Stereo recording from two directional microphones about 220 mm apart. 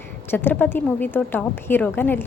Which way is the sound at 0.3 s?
10° left (ahead or behind).